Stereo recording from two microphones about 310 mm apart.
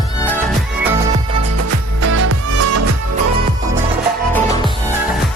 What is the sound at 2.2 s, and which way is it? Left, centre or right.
Music, right.